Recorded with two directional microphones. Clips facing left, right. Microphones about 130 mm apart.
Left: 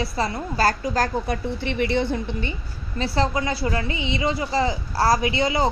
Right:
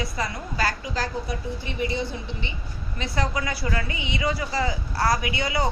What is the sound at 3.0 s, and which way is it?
A woman's voice, 30° left (ahead or behind).